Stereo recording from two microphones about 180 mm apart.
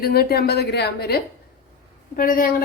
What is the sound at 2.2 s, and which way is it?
Speech, 50° left (ahead or behind).